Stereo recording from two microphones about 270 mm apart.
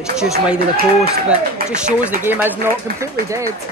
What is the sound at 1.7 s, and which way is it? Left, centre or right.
Speech, centre.